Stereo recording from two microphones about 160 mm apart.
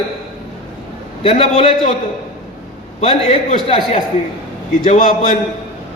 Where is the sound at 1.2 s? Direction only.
40° left (ahead or behind).